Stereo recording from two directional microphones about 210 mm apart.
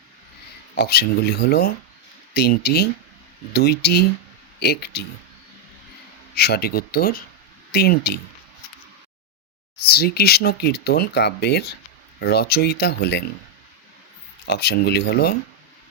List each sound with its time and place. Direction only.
0.8 s speech: 50° left (ahead or behind)
6.3 s speech: 50° left (ahead or behind)
9.7 s speech: 50° left (ahead or behind)
14.4 s speech: 50° left (ahead or behind)